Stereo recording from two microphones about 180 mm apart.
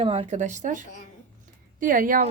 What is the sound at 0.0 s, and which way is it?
A woman's voice, 35° right (ahead or behind).